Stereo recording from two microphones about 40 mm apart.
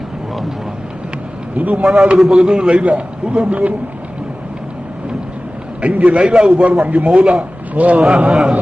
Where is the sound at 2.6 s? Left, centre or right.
Right.